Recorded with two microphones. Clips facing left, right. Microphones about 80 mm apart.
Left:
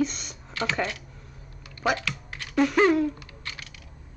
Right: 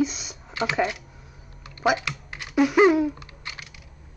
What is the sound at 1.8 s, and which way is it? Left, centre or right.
Typing, centre.